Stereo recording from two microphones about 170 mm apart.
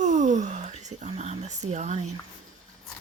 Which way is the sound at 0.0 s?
45° right (ahead or behind).